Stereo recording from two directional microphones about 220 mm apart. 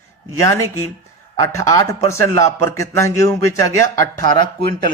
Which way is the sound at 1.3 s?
15° left (ahead or behind).